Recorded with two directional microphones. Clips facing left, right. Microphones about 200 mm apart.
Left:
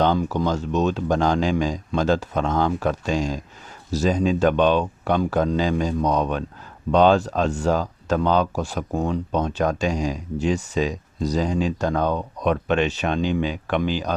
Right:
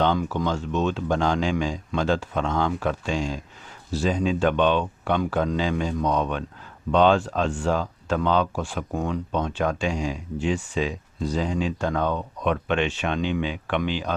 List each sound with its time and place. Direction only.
0.0 s speech: 40° left (ahead or behind)